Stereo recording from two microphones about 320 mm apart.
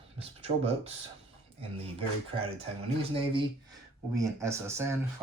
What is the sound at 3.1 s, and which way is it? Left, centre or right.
Speech, centre.